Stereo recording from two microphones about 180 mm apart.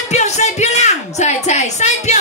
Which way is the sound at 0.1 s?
40° left (ahead or behind).